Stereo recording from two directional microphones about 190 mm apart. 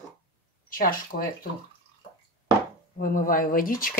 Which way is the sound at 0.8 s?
50° left (ahead or behind).